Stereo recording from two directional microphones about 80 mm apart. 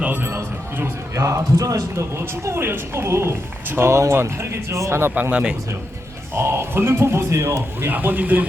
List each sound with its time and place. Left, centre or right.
0.0 s a sound: centre
0.3 s a man's voice: right
5.3 s speech: centre
6.3 s a man's voice: right